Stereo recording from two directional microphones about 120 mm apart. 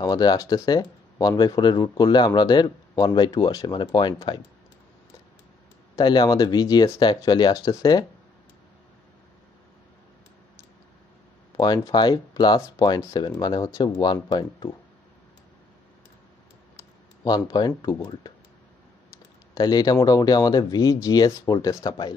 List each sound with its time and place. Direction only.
0.0 s speech: 35° left (ahead or behind)
5.9 s speech: 35° left (ahead or behind)
11.5 s speech: 30° left (ahead or behind)
17.2 s speech: 35° left (ahead or behind)
19.5 s speech: 35° left (ahead or behind)